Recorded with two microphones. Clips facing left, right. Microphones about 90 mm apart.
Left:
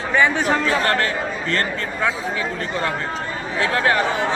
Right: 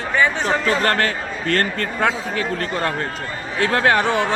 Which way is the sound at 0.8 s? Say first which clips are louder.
Even; 55° right (ahead or behind).